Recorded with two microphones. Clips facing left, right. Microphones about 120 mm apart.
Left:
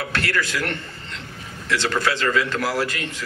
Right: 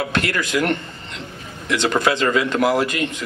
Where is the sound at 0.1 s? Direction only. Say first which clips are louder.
Right 3 dB; 20° right (ahead or behind).